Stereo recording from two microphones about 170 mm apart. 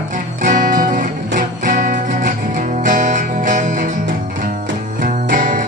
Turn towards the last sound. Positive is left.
turn(degrees=-50)  # may be behind; listen again after turning